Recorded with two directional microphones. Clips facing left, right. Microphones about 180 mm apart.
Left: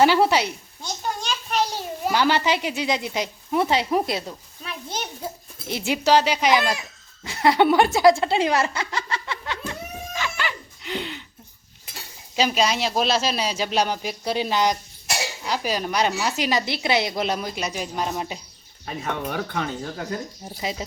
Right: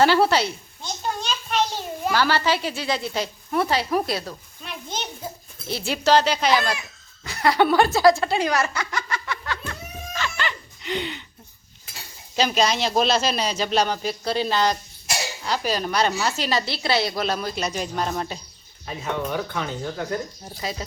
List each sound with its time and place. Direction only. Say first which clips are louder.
0.0 s a child's voice: even; 15° left (ahead or behind)
4.6 s a sound: left 1 dB; centre (ahead or behind)
5.6 s a woman's voice: even; 15° left (ahead or behind)
7.3 s snicker: left 1 dB; 25° left (ahead or behind); by 11.2 s centre (ahead or behind)
12.4 s a woman's voice: even; 5° left (ahead or behind)
19.3 s speech: even; 60° left (ahead or behind)
20.6 s a woman's voice: left 1 dB; 20° left (ahead or behind)